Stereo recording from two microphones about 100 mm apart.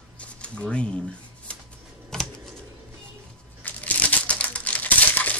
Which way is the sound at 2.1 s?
5° left (ahead or behind).